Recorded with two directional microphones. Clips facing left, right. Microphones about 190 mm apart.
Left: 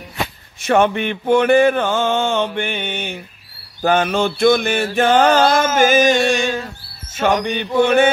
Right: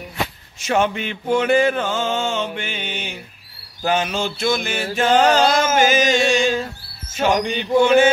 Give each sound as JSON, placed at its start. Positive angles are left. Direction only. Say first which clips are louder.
{"t": 0.6, "sound": "mantra", "louder": "left 4 dB", "side_deg": 55}